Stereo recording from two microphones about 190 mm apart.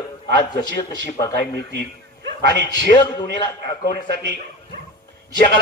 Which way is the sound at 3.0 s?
20° left (ahead or behind).